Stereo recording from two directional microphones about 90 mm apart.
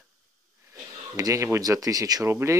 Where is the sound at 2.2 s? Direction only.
30° right (ahead or behind).